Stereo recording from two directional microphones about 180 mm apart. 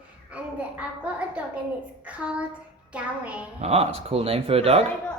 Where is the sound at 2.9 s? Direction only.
5° right (ahead or behind).